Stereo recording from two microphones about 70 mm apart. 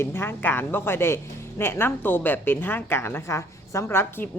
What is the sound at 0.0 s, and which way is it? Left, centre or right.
A woman's voice, left.